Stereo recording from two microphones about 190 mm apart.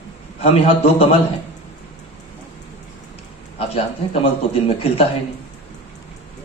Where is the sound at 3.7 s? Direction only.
30° left (ahead or behind).